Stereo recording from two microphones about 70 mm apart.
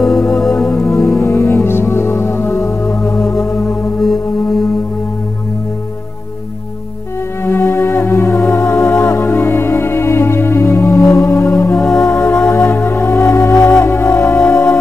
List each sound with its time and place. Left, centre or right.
0.0 s music: centre
1.2 s music: left
3.1 s music: centre
7.4 s music: left